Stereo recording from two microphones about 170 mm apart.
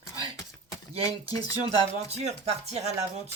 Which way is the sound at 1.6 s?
40° right (ahead or behind).